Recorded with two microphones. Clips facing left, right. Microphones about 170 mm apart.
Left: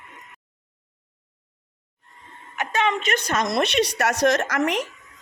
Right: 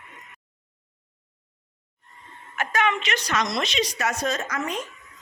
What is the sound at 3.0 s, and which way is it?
Speech, 50° left (ahead or behind).